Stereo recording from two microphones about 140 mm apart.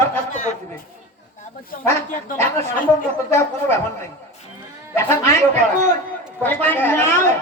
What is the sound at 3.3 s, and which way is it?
Speech, 15° left (ahead or behind).